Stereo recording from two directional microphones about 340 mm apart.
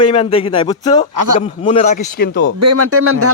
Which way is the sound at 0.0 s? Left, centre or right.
Centre.